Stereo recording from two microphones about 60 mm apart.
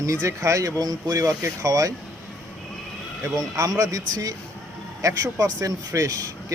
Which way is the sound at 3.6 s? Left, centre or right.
Right.